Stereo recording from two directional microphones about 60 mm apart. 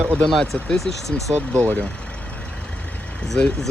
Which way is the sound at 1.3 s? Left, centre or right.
Right.